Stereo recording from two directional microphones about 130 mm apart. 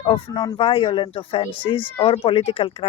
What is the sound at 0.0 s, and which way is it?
Speech, 35° left (ahead or behind).